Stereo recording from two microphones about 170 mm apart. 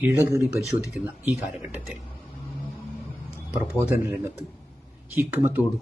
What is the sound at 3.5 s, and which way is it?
Speech, 10° right (ahead or behind).